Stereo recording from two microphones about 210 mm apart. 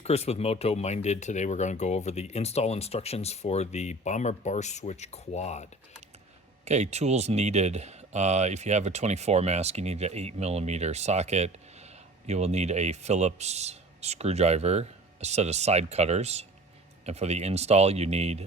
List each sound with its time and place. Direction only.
0.0 s speech: 30° left (ahead or behind)
6.7 s speech: 30° right (ahead or behind)